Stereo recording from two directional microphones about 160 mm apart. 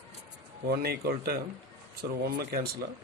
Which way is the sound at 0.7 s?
75° right (ahead or behind).